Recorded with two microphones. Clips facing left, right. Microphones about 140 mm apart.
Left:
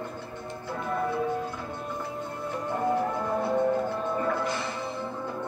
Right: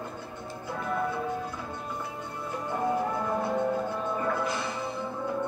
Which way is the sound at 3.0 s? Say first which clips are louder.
Left 1 dB; centre (ahead or behind).